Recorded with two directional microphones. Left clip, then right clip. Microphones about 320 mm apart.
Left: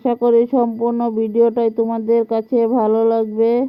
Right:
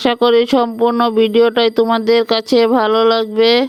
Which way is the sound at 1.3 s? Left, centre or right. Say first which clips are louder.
Right 3 dB; centre.